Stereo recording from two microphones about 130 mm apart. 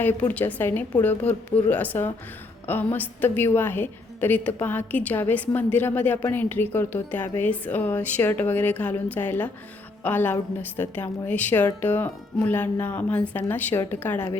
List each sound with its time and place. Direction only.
0.0 s a woman's voice: 15° left (ahead or behind)